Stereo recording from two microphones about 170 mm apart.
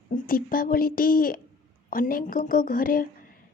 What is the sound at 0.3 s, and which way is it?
A woman's voice, 55° left (ahead or behind).